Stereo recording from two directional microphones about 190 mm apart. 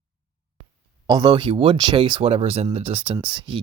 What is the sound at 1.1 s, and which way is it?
Speech, 25° right (ahead or behind).